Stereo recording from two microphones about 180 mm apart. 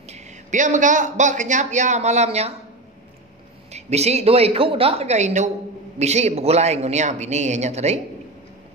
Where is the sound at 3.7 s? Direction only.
35° right (ahead or behind).